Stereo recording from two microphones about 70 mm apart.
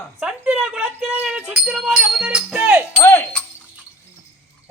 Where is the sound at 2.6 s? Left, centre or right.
Right.